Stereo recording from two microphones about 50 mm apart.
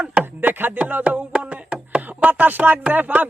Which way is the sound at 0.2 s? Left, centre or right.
Right.